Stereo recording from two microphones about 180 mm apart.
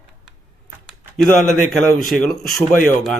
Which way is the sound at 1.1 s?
Centre (ahead or behind).